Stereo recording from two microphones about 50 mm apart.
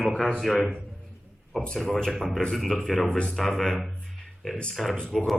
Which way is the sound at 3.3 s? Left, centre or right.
Centre.